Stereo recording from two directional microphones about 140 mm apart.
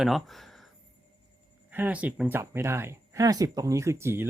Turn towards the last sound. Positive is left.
turn(degrees=-20)  # may be behind; listen again after turning